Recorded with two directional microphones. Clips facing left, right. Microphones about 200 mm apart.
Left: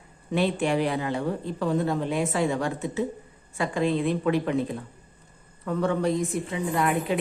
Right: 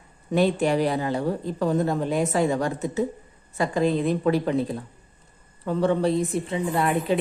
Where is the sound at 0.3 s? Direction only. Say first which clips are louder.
Right 3 dB; 40° right (ahead or behind).